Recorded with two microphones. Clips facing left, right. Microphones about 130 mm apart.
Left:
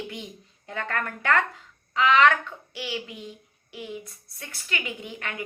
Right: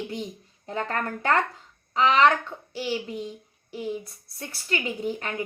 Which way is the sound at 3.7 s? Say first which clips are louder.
Right 7 dB; 35° right (ahead or behind).